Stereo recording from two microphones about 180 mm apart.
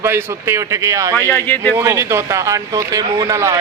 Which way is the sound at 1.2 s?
10° left (ahead or behind).